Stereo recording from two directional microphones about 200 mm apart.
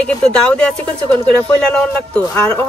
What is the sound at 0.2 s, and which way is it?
Speech, 5° left (ahead or behind).